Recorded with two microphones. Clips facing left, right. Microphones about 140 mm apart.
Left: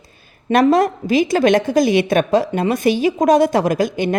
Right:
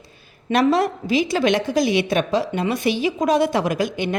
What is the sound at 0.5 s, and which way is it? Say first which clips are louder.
Speech: left 4 dB; 45° left (ahead or behind).